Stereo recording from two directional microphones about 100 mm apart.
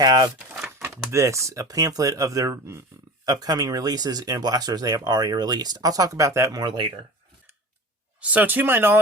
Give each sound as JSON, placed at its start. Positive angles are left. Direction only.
{"t": 0.0, "sound": "speech", "side_deg": -40}
{"t": 0.3, "sound": "a sound", "side_deg": -5}
{"t": 1.1, "sound": "speech", "side_deg": -30}
{"t": 3.2, "sound": "speech", "side_deg": -40}
{"t": 8.2, "sound": "speech", "side_deg": -15}